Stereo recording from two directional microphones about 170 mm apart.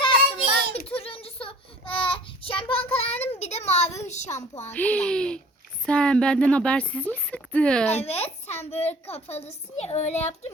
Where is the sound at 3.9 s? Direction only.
40° left (ahead or behind).